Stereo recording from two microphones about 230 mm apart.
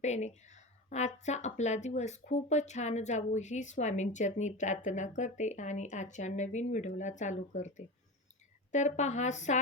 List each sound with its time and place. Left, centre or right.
0.0 s a woman's voice: left